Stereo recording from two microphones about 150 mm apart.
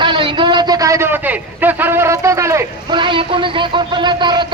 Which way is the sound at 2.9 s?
35° right (ahead or behind).